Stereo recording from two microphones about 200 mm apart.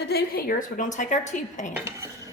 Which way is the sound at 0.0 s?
50° left (ahead or behind).